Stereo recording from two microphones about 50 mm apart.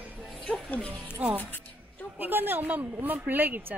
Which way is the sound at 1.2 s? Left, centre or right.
Right.